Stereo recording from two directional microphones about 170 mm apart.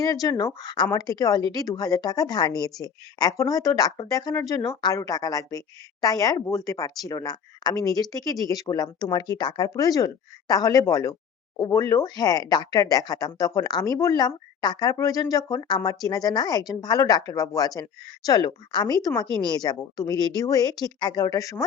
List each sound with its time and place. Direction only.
0.0 s speech: 20° left (ahead or behind)